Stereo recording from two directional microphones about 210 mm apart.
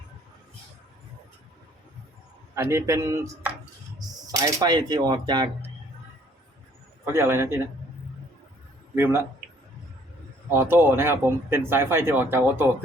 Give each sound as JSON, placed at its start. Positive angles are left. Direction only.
{"t": 2.6, "sound": "speech", "side_deg": -10}
{"t": 7.0, "sound": "speech", "side_deg": -10}
{"t": 9.0, "sound": "speech", "side_deg": -10}
{"t": 10.5, "sound": "speech", "side_deg": -10}